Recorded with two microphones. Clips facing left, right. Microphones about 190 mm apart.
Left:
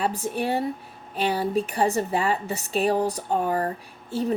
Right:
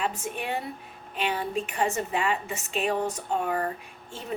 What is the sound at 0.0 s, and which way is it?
Speech, 35° left (ahead or behind).